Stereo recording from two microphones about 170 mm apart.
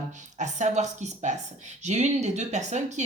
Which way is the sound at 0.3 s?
45° right (ahead or behind).